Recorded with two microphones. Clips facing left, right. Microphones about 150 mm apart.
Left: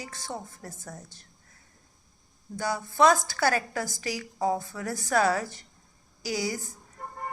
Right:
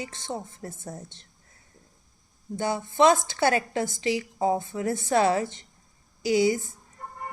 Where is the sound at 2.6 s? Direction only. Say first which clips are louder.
Right 2 dB; 25° right (ahead or behind).